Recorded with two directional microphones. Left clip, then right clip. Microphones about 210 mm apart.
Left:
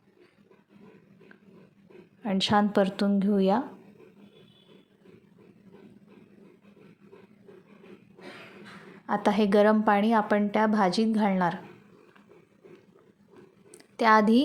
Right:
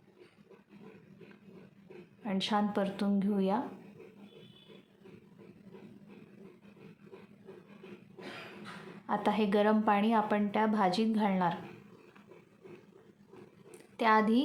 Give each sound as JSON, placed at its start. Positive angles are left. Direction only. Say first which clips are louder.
{"t": 2.2, "sound": "a woman's voice", "louder": "left 8 dB", "side_deg": 30}
{"t": 9.0, "sound": "a woman's voice", "louder": "left 6 dB", "side_deg": 25}
{"t": 13.7, "sound": "a sound", "louder": "left 6 dB", "side_deg": 25}